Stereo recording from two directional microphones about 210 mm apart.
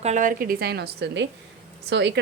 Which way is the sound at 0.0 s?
35° right (ahead or behind).